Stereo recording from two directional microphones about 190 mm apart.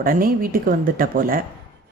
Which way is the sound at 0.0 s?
50° right (ahead or behind).